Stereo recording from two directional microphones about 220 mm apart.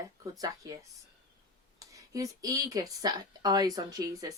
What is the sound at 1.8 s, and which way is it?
Speech, 15° right (ahead or behind).